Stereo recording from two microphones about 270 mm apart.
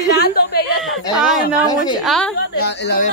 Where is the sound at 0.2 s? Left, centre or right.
Left.